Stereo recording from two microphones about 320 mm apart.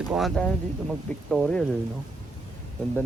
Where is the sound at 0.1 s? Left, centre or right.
Centre.